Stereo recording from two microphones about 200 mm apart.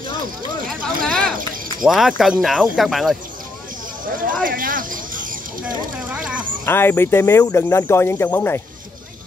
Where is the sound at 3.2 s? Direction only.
45° right (ahead or behind).